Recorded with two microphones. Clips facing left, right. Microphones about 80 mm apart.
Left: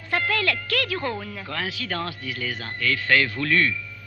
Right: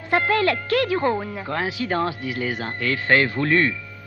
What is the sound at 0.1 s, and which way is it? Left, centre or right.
A woman's voice, right.